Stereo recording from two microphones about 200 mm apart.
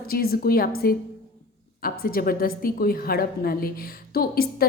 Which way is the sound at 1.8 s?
45° left (ahead or behind).